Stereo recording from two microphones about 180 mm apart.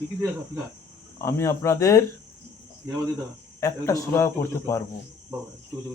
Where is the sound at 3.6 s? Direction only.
15° left (ahead or behind).